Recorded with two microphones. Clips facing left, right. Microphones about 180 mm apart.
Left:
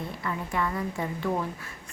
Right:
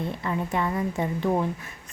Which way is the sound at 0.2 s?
25° right (ahead or behind).